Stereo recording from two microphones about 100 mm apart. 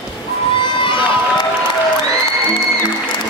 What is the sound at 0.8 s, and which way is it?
Run, 55° left (ahead or behind).